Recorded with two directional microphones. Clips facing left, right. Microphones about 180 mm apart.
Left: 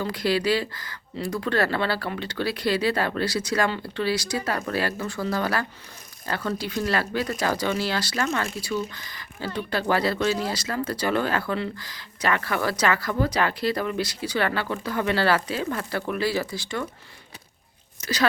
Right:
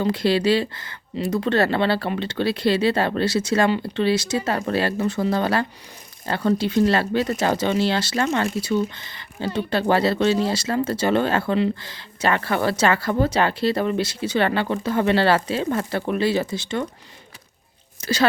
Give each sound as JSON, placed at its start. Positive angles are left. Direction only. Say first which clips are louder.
{"t": 0.0, "sound": "speech", "louder": "right 5 dB", "side_deg": -25}
{"t": 18.0, "sound": "speech", "louder": "right 4 dB", "side_deg": -30}